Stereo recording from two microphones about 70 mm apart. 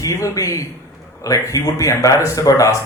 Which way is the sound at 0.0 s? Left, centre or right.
Left.